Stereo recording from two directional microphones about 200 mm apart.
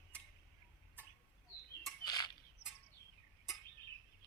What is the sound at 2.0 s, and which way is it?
Bird, 20° left (ahead or behind).